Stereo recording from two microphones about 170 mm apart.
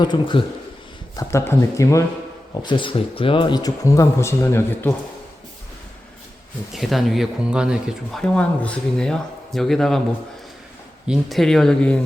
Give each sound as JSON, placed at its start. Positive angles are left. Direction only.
{"t": 0.0, "sound": "speech", "side_deg": 25}
{"t": 1.1, "sound": "speech", "side_deg": 15}
{"t": 2.6, "sound": "speech", "side_deg": 30}
{"t": 6.7, "sound": "speech", "side_deg": 0}
{"t": 11.1, "sound": "speech", "side_deg": 0}